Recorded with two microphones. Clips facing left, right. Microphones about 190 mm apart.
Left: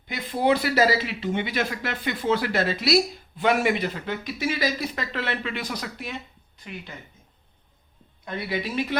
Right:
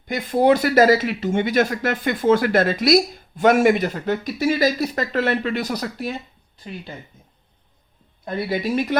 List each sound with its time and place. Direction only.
0.1 s speech: 45° right (ahead or behind)
8.2 s speech: 35° right (ahead or behind)